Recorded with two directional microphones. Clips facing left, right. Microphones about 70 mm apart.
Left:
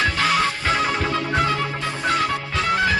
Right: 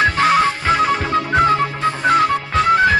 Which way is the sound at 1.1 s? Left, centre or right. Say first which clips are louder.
Right 6 dB; right.